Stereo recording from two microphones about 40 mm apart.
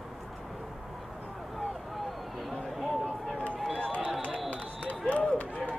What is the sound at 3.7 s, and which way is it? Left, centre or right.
Run, left.